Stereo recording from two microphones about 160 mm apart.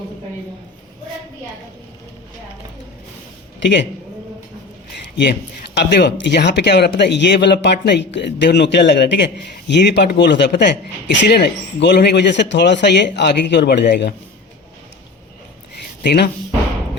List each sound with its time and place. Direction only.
3.6 s speech: 90° left
5.7 s speech: 90° left
16.0 s speech: 90° left